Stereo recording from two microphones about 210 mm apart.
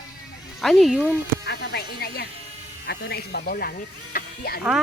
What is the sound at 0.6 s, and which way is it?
Speech, centre (ahead or behind).